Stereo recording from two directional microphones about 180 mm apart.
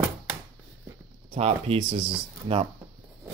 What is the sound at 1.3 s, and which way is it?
Speech, 35° right (ahead or behind).